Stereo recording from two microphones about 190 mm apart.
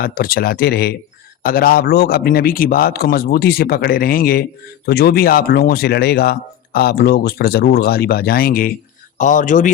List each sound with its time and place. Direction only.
0.0 s speech: 50° left (ahead or behind)